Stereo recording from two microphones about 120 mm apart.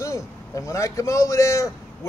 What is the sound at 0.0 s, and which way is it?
A man's voice, 25° left (ahead or behind).